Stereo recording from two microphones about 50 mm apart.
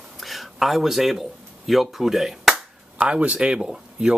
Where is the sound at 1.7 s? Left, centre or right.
Centre.